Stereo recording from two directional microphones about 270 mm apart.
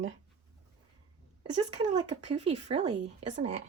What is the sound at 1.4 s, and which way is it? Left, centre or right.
Speech, right.